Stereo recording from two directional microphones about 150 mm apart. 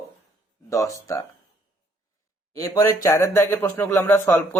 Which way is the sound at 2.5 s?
20° left (ahead or behind).